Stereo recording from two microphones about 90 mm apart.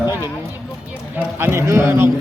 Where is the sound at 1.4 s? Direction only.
30° right (ahead or behind).